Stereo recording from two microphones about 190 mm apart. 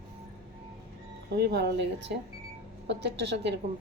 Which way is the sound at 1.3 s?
60° right (ahead or behind).